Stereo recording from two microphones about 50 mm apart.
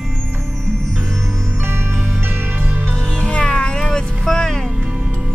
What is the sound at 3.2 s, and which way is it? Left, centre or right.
Music, centre.